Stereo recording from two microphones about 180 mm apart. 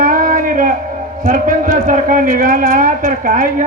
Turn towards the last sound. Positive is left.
turn(degrees=-50)  # may be behind; listen again after turning